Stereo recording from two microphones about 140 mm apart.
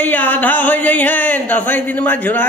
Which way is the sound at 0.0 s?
15° left (ahead or behind).